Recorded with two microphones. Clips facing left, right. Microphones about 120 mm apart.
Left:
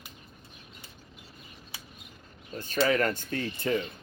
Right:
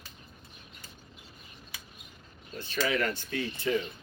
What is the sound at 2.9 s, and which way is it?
Speech, 40° left (ahead or behind).